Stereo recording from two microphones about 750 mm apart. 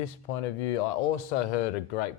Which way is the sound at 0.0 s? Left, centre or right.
Left.